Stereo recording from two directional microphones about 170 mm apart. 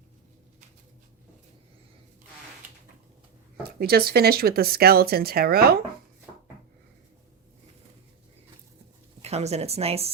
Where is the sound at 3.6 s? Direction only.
65° right (ahead or behind).